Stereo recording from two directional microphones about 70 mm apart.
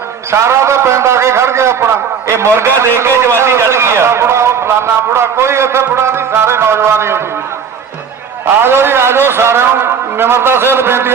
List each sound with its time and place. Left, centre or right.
0.3 s a man's voice: right
8.4 s a man's voice: right